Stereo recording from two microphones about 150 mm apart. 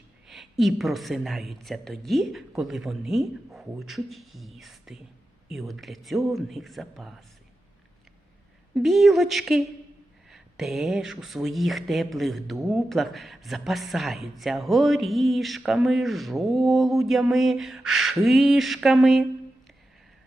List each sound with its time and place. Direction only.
0.3 s speech: centre (ahead or behind)
8.7 s speech: centre (ahead or behind)